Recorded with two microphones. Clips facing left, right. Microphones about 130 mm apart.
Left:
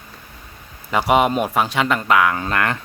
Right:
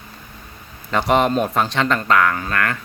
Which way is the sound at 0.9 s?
10° left (ahead or behind).